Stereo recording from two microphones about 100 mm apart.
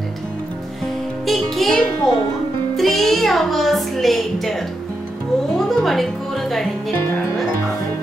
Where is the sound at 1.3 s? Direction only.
5° left (ahead or behind).